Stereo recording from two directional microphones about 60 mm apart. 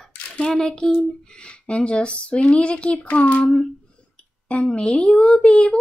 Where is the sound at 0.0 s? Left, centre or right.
Centre.